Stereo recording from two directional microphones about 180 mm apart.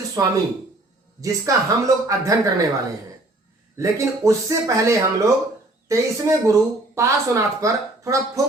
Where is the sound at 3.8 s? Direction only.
15° right (ahead or behind).